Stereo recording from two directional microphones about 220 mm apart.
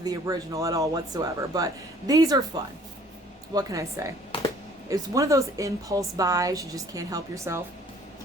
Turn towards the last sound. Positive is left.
turn(degrees=-15)  # may be behind; listen again after turning